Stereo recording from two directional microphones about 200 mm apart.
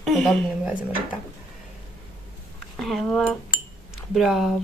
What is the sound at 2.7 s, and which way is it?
Speech, centre (ahead or behind).